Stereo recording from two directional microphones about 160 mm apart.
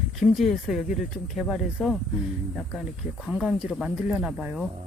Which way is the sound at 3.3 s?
Centre (ahead or behind).